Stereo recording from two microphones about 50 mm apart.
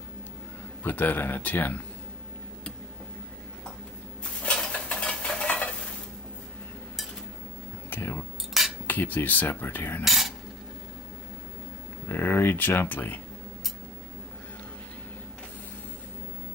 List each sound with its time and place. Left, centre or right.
0.8 s speech: left
4.2 s dishes: centre
5.5 s stir: left
8.0 s cutlery: left
8.8 s cutlery: left
9.5 s speech: left
10.0 s cutlery: centre
12.1 s speech: left